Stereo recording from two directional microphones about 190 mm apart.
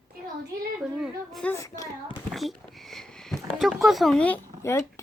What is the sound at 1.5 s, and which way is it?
Speech, 15° left (ahead or behind).